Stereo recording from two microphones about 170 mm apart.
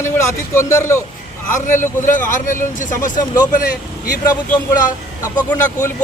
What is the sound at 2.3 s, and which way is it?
Speech, 50° left (ahead or behind).